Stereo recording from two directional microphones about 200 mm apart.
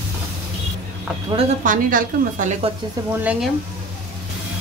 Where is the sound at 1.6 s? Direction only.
40° right (ahead or behind).